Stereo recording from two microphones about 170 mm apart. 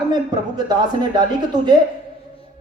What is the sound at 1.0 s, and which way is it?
Speech, 25° right (ahead or behind).